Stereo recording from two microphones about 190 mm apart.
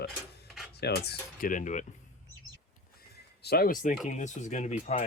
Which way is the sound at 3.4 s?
55° left (ahead or behind).